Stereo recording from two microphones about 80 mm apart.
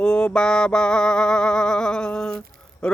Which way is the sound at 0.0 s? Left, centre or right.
Centre.